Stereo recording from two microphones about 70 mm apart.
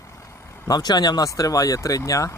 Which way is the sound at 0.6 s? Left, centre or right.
Left.